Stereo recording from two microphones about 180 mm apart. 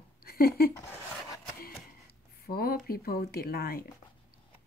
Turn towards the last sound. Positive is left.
turn(degrees=60)  # may be behind; listen again after turning